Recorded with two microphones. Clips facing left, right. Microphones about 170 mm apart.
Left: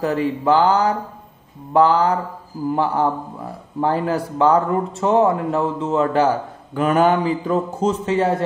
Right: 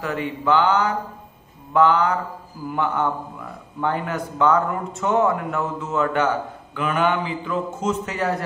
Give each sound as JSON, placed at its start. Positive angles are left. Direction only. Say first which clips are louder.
{"t": 0.0, "sound": "speech", "louder": "left 6 dB", "side_deg": 35}